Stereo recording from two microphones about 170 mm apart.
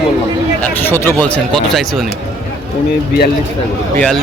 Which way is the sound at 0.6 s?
10° left (ahead or behind).